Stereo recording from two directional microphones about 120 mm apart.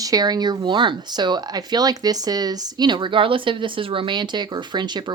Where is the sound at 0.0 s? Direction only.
30° right (ahead or behind).